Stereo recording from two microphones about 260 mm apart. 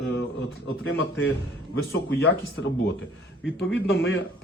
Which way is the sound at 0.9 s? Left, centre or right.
Left.